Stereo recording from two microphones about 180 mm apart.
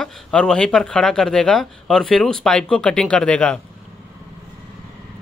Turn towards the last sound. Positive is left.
turn(degrees=5)  # may be behind; listen again after turning